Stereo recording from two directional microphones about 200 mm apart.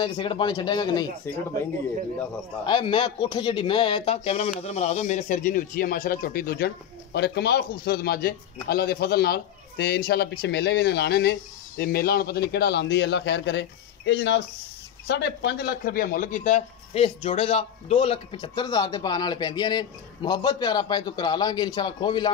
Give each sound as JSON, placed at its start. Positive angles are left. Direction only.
{"t": 0.0, "sound": "speech", "side_deg": 25}
{"t": 2.6, "sound": "speech", "side_deg": 25}